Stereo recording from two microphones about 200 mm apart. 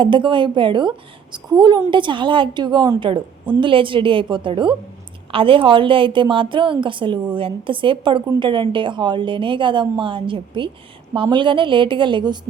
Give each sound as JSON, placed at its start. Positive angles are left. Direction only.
{"t": 0.0, "sound": "a woman's voice", "side_deg": -25}